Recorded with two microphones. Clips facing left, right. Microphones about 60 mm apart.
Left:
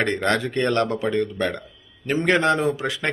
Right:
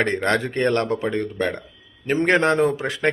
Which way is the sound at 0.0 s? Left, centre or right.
Right.